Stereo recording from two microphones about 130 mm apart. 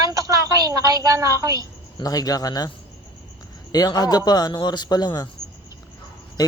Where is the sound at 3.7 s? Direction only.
30° left (ahead or behind).